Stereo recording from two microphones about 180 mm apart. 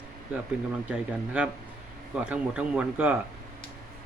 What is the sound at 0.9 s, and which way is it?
Speech, 5° right (ahead or behind).